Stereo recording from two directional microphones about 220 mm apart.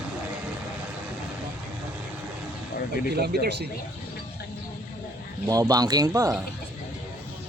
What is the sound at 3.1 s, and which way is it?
Speech, 45° right (ahead or behind).